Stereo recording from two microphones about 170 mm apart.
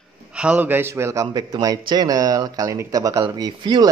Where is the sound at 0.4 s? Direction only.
10° right (ahead or behind).